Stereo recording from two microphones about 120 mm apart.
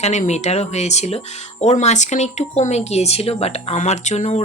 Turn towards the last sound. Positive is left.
turn(degrees=70)  # may be behind; listen again after turning